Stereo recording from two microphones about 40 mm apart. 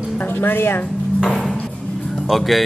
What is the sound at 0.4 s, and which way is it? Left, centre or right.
Speech, left.